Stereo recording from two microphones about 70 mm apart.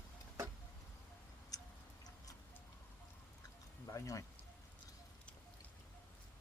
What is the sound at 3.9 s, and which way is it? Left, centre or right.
Speech, left.